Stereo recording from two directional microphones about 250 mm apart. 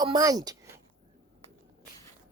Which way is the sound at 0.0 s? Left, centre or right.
Centre.